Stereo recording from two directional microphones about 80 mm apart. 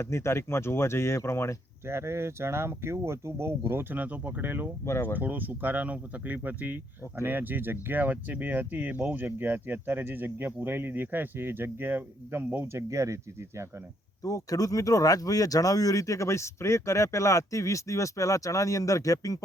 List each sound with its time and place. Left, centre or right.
0.0 s speech: left
1.9 s speech: right
4.0 s speech: right
14.3 s speech: left